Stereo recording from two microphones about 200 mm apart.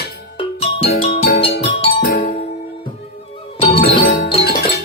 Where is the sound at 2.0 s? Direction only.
45° left (ahead or behind).